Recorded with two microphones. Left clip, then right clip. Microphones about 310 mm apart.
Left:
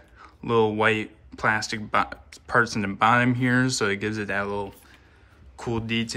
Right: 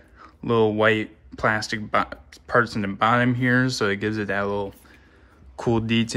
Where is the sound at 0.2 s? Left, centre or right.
Centre.